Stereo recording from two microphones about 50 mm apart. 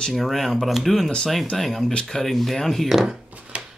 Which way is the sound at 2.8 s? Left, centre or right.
Centre.